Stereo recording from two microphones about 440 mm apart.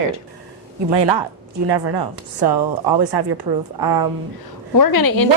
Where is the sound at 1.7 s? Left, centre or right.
Right.